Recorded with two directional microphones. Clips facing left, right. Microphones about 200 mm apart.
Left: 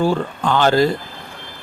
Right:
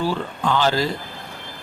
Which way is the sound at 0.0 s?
50° left (ahead or behind).